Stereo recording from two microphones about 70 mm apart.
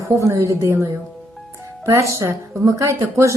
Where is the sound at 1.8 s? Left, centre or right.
Right.